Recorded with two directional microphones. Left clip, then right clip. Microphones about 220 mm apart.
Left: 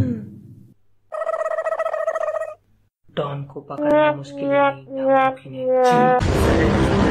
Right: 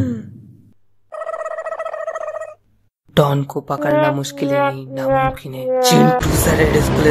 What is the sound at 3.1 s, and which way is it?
Speech, 40° right (ahead or behind).